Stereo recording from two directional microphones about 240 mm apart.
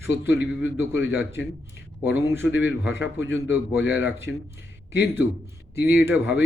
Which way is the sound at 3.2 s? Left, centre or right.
Centre.